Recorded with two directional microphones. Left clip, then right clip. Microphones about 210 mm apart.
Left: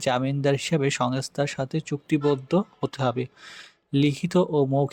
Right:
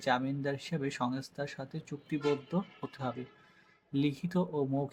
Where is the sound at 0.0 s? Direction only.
40° left (ahead or behind).